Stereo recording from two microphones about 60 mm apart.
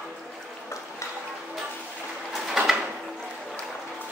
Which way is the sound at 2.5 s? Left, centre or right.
Centre.